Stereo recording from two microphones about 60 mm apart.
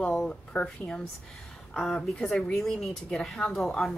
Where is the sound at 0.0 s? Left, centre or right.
Centre.